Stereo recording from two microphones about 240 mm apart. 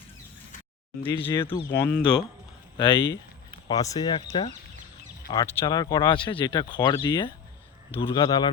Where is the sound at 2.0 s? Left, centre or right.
Centre.